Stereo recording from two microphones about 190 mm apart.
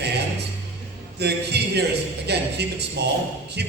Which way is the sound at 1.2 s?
60° right (ahead or behind).